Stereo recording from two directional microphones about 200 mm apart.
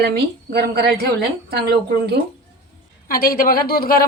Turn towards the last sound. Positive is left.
turn(degrees=50)  # may be behind; listen again after turning